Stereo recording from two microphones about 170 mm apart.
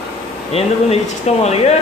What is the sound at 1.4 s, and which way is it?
Speech, 40° left (ahead or behind).